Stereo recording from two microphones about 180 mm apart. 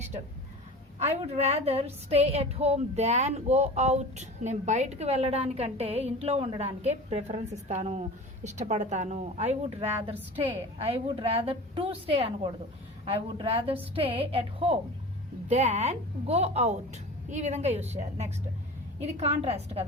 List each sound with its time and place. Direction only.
0.9 s a woman's voice: 35° right (ahead or behind)